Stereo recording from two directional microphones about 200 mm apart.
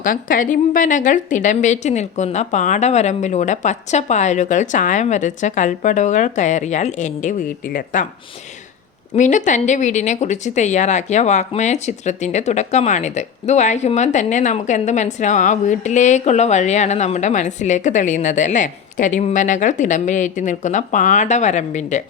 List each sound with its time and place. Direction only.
0.0 s speech: 45° left (ahead or behind)
9.1 s speech: 35° left (ahead or behind)